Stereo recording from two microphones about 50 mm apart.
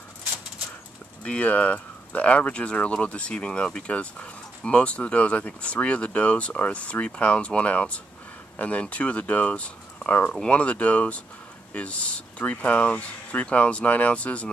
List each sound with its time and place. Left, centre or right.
1.2 s speech: left